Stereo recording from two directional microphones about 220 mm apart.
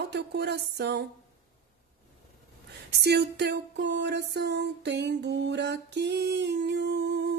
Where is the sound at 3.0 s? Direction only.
50° right (ahead or behind).